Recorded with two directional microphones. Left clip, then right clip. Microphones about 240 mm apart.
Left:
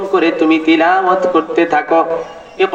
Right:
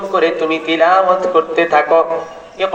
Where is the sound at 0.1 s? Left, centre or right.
Left.